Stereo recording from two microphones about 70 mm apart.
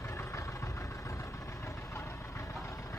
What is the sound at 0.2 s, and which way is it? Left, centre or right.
Vehicle, left.